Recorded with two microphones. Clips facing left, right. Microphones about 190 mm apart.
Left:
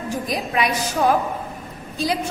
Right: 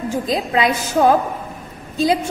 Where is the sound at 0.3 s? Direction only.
25° right (ahead or behind).